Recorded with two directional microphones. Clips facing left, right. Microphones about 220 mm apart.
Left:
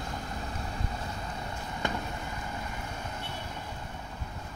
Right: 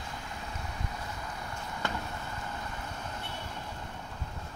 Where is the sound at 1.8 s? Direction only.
15° left (ahead or behind).